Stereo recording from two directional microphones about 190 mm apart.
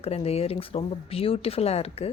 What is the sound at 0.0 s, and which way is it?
A woman's voice, 35° left (ahead or behind).